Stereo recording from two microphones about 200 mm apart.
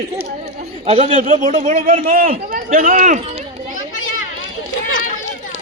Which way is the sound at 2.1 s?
45° right (ahead or behind).